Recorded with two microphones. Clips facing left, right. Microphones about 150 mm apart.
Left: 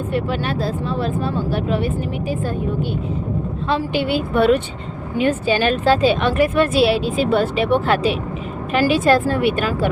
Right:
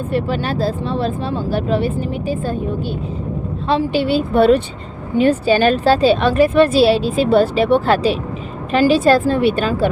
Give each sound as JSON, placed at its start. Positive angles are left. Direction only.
{"t": 0.1, "sound": "a woman's voice", "side_deg": -35}
{"t": 3.7, "sound": "a woman's voice", "side_deg": -30}